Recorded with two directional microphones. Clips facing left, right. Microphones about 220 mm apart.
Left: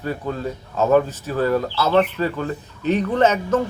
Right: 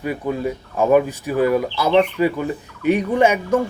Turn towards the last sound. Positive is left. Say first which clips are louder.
# right 1 dB
turn(degrees=-10)  # may be behind; listen again after turning